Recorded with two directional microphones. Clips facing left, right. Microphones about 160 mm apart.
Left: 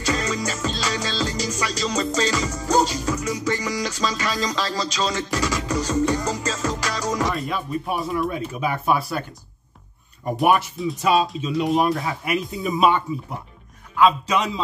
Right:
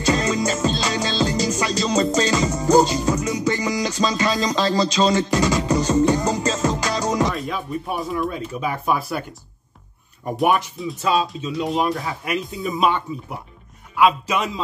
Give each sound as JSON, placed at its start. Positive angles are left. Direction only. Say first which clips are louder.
{"t": 0.0, "sound": "music", "louder": "right 4 dB", "side_deg": -25}
{"t": 7.3, "sound": "speech", "louder": "even", "side_deg": 0}
{"t": 10.3, "sound": "speech", "louder": "even", "side_deg": 0}
{"t": 13.9, "sound": "a man's voice", "louder": "even", "side_deg": -10}